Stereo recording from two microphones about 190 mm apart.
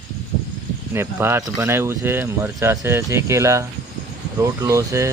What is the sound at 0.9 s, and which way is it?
Speech, 15° right (ahead or behind).